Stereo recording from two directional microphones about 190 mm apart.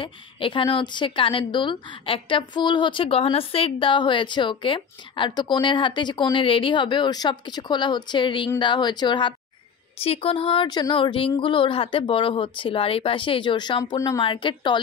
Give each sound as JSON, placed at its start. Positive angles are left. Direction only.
{"t": 0.0, "sound": "a woman's voice", "side_deg": 25}